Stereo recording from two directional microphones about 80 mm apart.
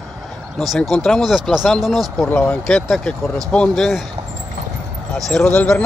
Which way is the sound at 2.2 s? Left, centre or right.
Left.